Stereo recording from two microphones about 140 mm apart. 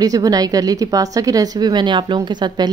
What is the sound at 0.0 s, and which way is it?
Speech, 25° right (ahead or behind).